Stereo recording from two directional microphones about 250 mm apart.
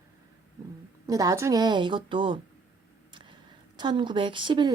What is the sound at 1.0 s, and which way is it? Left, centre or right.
A woman's voice, centre.